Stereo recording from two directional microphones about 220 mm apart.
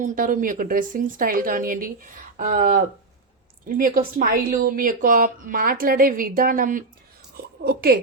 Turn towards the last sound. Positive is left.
turn(degrees=-45)  # may be behind; listen again after turning